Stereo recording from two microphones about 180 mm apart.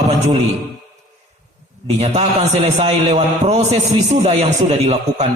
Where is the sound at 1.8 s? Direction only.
40° right (ahead or behind).